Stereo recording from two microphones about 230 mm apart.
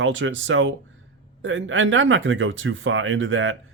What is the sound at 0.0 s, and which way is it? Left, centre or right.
Speech, right.